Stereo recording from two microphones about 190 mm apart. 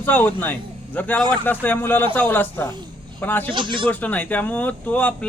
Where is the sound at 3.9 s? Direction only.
10° left (ahead or behind).